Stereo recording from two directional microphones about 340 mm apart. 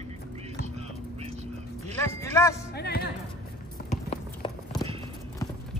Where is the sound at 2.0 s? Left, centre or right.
Centre.